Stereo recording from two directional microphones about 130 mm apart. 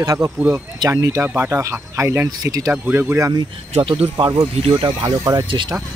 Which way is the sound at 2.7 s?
10° right (ahead or behind).